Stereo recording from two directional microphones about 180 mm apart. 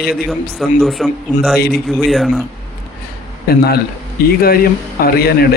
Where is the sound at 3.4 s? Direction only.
60° left (ahead or behind).